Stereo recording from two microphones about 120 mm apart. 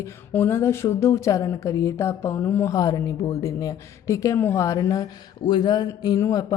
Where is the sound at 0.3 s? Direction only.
20° left (ahead or behind).